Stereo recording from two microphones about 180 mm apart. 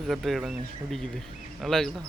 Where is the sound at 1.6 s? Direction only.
Centre (ahead or behind).